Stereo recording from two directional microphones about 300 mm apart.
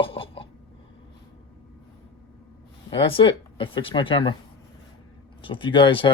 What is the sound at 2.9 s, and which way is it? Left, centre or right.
Speech, centre.